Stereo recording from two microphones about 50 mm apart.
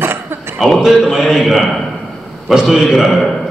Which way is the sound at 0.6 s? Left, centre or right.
Centre.